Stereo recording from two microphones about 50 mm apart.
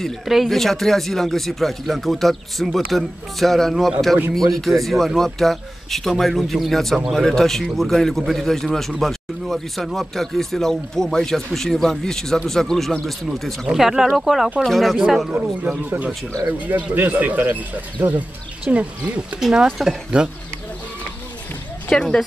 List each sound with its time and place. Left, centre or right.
0.2 s speech: centre
15.3 s speech: right
16.4 s speech: right
18.0 s speech: right
18.7 s speech: right
19.5 s speech: centre
21.9 s a woman's voice: centre